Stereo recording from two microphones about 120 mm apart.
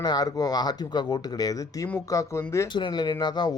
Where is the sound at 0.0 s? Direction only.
35° left (ahead or behind).